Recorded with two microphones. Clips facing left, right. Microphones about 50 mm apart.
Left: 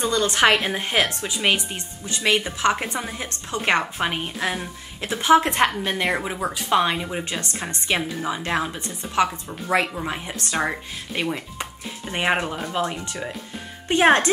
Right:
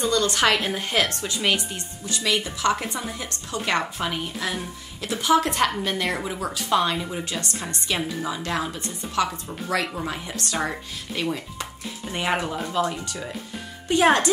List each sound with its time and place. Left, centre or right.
0.0 s a woman's voice: left